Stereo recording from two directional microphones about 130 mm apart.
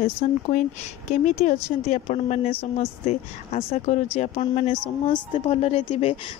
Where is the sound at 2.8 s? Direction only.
50° left (ahead or behind).